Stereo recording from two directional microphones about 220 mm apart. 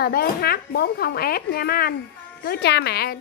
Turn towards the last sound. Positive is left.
turn(degrees=45)  # may be behind; listen again after turning